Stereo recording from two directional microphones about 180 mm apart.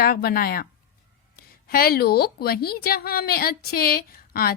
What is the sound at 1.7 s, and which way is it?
A woman's voice, 55° left (ahead or behind).